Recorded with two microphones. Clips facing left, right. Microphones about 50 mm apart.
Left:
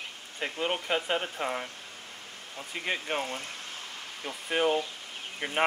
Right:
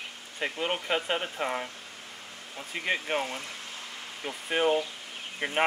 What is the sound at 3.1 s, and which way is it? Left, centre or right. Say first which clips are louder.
Speech: right 1 dB; centre.